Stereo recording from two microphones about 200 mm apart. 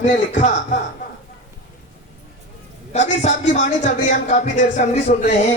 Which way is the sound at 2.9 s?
35° left (ahead or behind).